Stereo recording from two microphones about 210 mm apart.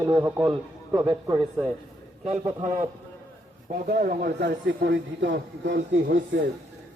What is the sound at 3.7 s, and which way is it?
A man's voice, 45° right (ahead or behind).